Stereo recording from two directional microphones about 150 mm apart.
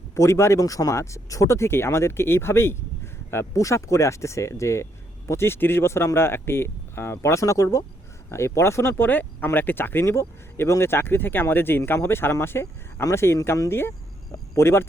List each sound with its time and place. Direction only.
0.1 s speech: 20° left (ahead or behind)